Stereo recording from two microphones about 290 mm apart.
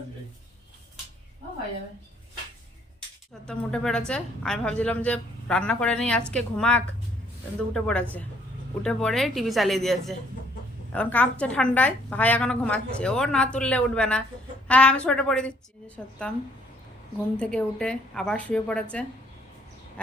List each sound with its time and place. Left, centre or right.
3.4 s a woman's voice: centre